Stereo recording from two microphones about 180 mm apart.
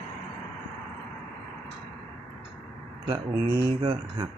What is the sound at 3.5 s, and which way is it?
Speech, 25° right (ahead or behind).